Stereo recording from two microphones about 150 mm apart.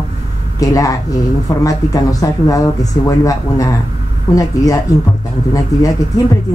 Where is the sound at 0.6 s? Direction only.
20° left (ahead or behind).